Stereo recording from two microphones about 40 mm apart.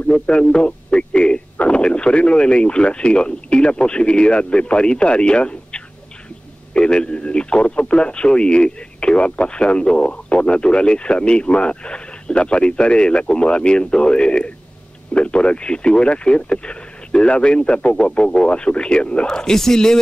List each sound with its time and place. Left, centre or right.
0.3 s radio: left
1.6 s speech: left
19.2 s speech: centre